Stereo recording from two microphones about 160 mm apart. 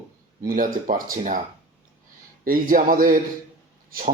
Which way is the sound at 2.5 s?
60° right (ahead or behind).